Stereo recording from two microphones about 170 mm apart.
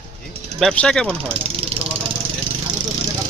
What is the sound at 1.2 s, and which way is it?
Vehicle, 35° right (ahead or behind).